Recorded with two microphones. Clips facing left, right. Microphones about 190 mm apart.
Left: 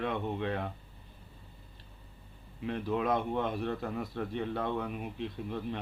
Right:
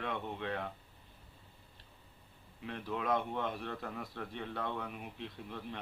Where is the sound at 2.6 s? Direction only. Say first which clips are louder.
Left 6 dB; 20° left (ahead or behind).